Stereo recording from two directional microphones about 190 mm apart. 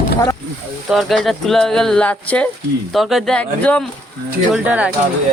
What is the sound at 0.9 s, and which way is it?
Speech, centre (ahead or behind).